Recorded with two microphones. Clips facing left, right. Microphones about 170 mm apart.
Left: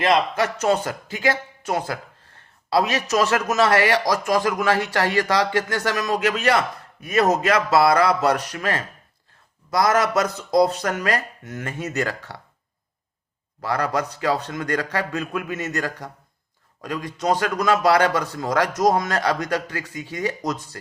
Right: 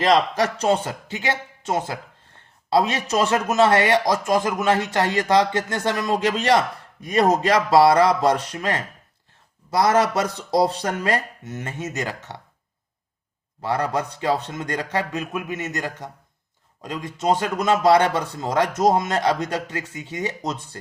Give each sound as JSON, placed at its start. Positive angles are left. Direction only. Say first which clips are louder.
{"t": 0.1, "sound": "a man's voice", "louder": "right 3 dB", "side_deg": -35}
{"t": 13.6, "sound": "a man's voice", "louder": "even", "side_deg": -25}